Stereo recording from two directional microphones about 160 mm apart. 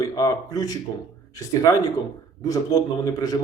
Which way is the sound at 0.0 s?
20° left (ahead or behind).